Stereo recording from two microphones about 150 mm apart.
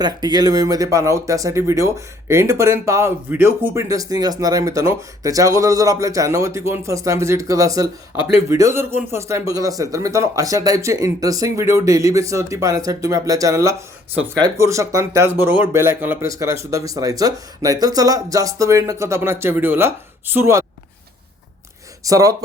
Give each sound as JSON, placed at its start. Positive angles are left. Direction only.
{"t": 0.0, "sound": "speech", "side_deg": -25}
{"t": 22.0, "sound": "speech", "side_deg": -25}